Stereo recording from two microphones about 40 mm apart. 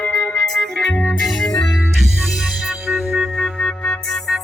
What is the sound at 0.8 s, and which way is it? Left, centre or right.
Music, centre.